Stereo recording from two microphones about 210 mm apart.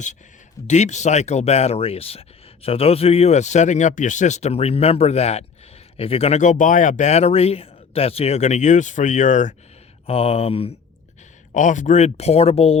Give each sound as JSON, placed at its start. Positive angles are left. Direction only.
{"t": 0.7, "sound": "speech", "side_deg": 35}